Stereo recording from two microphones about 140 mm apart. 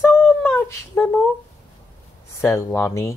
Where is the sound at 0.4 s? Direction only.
15° left (ahead or behind).